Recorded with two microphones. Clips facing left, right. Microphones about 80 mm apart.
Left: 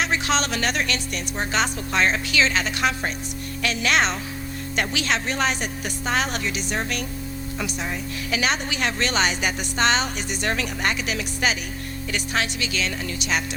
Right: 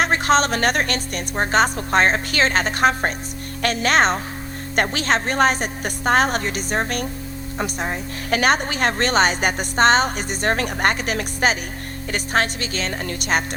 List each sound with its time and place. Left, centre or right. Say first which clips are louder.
0.0 s speech: right 6 dB; right
8.3 s speech: right 6 dB; right